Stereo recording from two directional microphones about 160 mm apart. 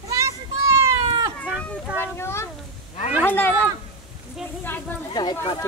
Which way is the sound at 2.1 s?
15° left (ahead or behind).